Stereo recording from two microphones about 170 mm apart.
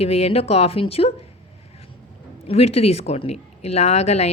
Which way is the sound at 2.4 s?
35° left (ahead or behind).